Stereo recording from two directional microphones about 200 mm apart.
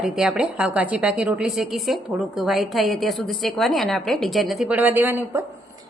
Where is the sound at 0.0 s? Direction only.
5° right (ahead or behind).